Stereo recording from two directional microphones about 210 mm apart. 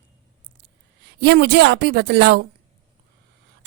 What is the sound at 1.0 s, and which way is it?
Speech, 50° right (ahead or behind).